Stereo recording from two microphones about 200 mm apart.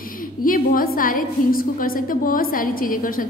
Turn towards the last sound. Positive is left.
turn(degrees=45)  # may be behind; listen again after turning